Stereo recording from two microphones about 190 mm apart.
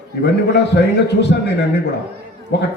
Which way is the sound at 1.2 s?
65° left (ahead or behind).